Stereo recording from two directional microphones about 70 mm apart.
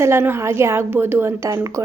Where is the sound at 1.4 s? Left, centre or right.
Right.